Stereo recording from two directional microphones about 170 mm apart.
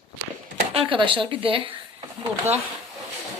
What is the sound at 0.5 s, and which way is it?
Speech, 35° right (ahead or behind).